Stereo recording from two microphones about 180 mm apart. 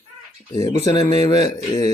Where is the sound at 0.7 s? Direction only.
20° left (ahead or behind).